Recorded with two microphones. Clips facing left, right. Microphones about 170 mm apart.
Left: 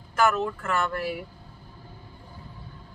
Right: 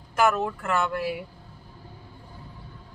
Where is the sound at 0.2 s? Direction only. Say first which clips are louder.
Right 1 dB; 15° right (ahead or behind).